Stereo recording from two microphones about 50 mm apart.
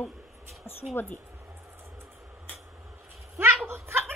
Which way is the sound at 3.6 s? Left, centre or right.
Right.